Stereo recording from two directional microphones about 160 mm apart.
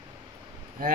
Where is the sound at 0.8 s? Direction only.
60° right (ahead or behind).